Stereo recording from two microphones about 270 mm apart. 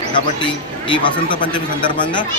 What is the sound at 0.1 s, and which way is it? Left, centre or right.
Speech, centre.